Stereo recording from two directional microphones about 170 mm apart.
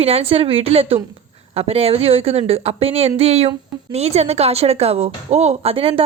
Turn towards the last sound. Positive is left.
turn(degrees=-30)  # may be behind; listen again after turning